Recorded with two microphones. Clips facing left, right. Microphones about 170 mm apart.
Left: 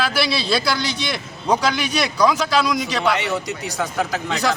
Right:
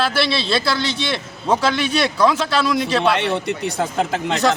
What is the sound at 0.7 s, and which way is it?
A man's voice, 30° right (ahead or behind).